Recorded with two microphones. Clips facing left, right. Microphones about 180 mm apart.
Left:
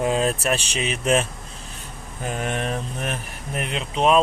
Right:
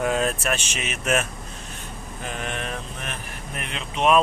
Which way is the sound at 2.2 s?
45° left (ahead or behind).